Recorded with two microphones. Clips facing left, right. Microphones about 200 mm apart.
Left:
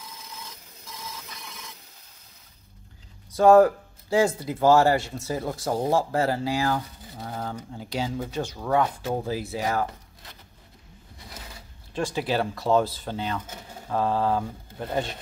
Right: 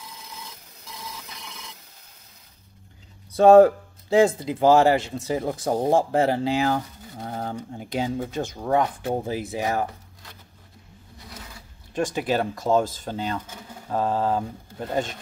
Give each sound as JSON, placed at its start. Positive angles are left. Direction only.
{"t": 3.3, "sound": "speech", "side_deg": -25}
{"t": 7.2, "sound": "a sound", "side_deg": -30}
{"t": 8.3, "sound": "speech", "side_deg": -20}
{"t": 11.9, "sound": "speech", "side_deg": -15}
{"t": 12.3, "sound": "speech", "side_deg": -45}
{"t": 13.8, "sound": "speech", "side_deg": -15}